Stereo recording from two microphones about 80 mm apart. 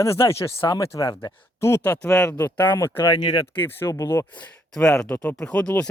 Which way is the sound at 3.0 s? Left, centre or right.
Left.